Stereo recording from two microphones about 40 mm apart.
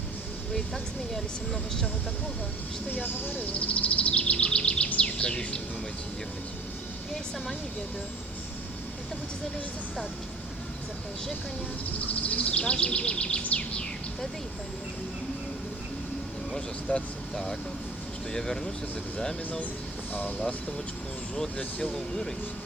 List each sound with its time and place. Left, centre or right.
0.5 s speech: centre
2.9 s speech: left
4.9 s a sound: left
11.9 s speech: left
16.9 s speech: left
17.3 s speech: centre
21.8 s speech: centre